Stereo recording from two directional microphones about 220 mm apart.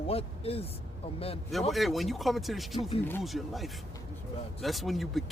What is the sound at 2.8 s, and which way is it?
Speech, 25° left (ahead or behind).